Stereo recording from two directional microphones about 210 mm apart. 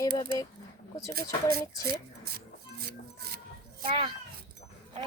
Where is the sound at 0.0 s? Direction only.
15° left (ahead or behind).